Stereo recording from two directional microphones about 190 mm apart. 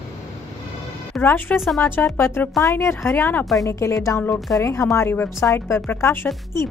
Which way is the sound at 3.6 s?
15° left (ahead or behind).